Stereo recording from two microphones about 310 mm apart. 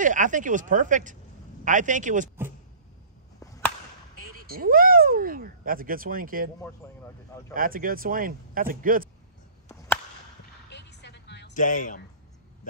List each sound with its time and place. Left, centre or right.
0.0 s speech: right
3.3 s chop: centre
4.2 s speech: right
6.8 s speech: centre
7.5 s speech: right
10.7 s a sound: left